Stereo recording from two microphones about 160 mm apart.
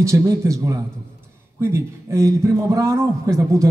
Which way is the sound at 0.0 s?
20° right (ahead or behind).